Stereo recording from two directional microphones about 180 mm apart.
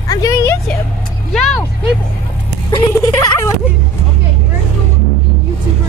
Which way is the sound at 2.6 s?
20° left (ahead or behind).